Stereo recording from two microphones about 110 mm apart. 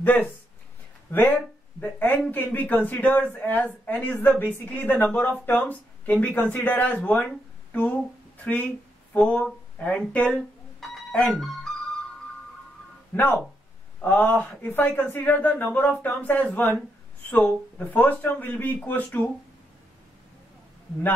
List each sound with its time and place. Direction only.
0.0 s a man's voice: 15° left (ahead or behind)
10.8 s a sound: 5° left (ahead or behind)
13.1 s a man's voice: 15° left (ahead or behind)